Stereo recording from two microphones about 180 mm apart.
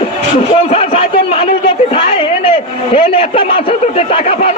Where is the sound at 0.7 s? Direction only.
35° left (ahead or behind).